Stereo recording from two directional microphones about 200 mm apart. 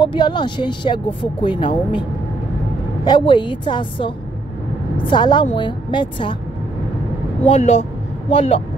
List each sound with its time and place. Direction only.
0.0 s speech: 20° left (ahead or behind)
3.1 s speech: 25° left (ahead or behind)
7.4 s speech: 30° left (ahead or behind)